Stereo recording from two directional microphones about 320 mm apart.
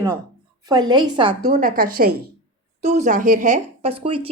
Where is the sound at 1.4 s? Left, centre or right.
Right.